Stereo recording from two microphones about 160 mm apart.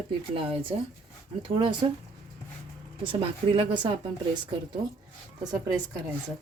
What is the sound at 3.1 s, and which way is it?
Speech, 35° right (ahead or behind).